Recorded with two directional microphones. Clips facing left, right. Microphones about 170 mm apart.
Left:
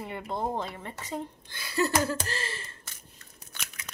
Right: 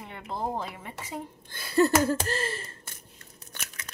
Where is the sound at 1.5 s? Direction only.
50° right (ahead or behind).